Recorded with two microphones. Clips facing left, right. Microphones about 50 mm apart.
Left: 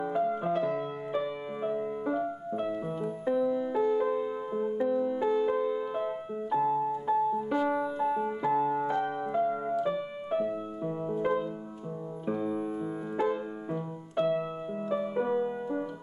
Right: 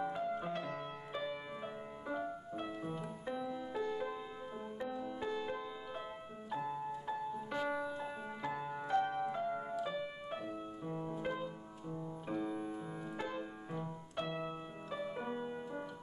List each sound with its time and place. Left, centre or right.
0.0 s music: centre
13.3 s music: centre